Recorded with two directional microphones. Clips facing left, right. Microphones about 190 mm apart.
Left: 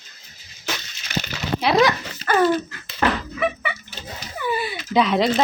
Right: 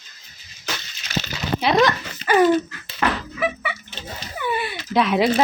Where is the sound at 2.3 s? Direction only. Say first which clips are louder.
Right 2 dB; 15° right (ahead or behind).